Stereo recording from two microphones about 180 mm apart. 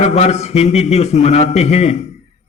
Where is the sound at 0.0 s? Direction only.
40° left (ahead or behind).